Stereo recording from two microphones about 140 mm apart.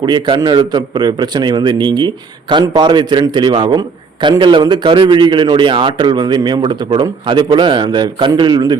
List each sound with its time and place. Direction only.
0.0 s a man's voice: 35° right (ahead or behind)